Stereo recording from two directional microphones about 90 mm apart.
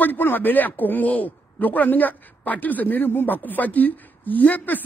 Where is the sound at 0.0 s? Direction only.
20° left (ahead or behind).